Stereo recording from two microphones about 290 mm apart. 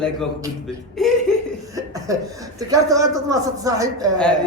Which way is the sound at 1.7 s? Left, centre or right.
Centre.